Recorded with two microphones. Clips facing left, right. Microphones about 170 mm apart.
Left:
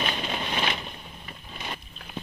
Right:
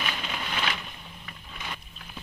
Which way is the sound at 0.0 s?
35° left (ahead or behind).